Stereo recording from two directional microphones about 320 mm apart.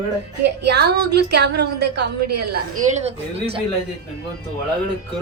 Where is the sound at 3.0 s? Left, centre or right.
Centre.